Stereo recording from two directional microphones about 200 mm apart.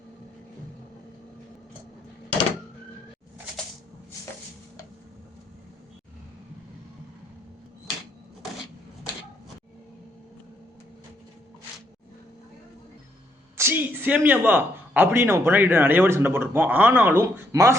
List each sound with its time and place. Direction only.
13.6 s speech: 10° right (ahead or behind)